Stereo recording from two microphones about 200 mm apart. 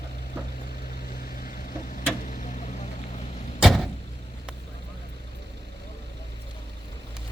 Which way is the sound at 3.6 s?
Centre (ahead or behind).